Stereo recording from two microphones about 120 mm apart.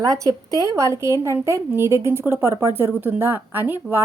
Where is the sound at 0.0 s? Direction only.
30° right (ahead or behind).